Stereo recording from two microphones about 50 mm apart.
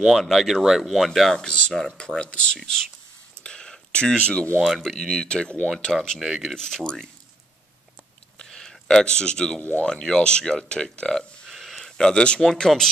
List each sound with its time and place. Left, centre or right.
0.0 s speech: centre
1.3 s speech: centre
3.4 s a sound: centre
4.6 s speech: centre
6.1 s speech: centre
6.4 s speech: centre
8.4 s a sound: centre
9.6 s speech: left
9.8 s speech: centre
12.0 s speech: centre